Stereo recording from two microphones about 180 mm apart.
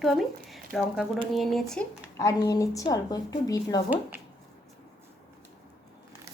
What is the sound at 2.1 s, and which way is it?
Speech, 15° left (ahead or behind).